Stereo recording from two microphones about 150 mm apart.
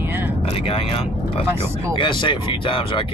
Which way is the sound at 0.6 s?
40° left (ahead or behind).